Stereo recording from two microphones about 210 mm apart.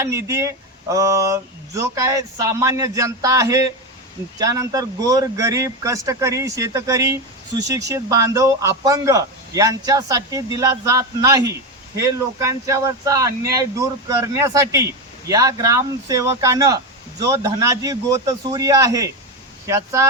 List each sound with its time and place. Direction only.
0.0 s speech: 15° right (ahead or behind)